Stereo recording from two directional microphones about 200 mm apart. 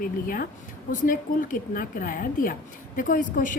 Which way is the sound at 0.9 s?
40° left (ahead or behind).